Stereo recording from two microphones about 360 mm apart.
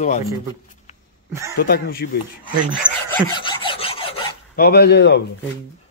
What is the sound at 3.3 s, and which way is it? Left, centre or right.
Filing, centre.